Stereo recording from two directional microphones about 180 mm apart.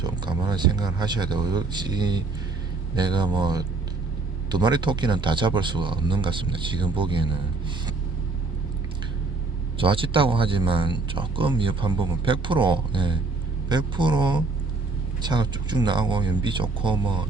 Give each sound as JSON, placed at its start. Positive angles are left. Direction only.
{"t": 0.0, "sound": "speech", "side_deg": -25}
{"t": 9.7, "sound": "speech", "side_deg": -30}